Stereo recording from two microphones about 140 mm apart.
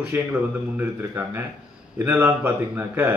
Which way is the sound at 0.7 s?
15° right (ahead or behind).